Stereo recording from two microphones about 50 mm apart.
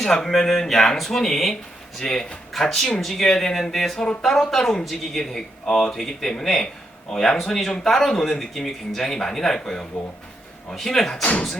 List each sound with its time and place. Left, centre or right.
0.0 s speech: centre
11.2 s speech: left